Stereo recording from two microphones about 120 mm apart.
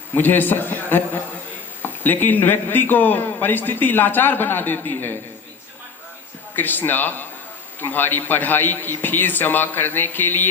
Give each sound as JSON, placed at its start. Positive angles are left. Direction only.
{"t": 0.1, "sound": "a man's voice", "side_deg": 15}
{"t": 6.6, "sound": "a man's voice", "side_deg": 15}